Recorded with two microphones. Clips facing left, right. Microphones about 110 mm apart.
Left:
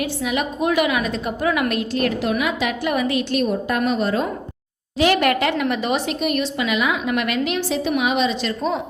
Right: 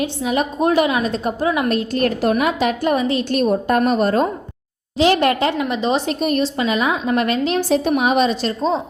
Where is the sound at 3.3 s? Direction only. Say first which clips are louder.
Right 4 dB; 40° right (ahead or behind).